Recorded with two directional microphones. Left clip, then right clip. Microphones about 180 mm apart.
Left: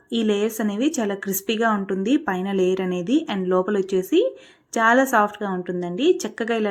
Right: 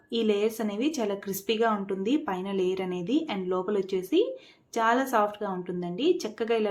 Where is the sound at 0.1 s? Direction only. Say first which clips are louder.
Left 4 dB; 25° left (ahead or behind).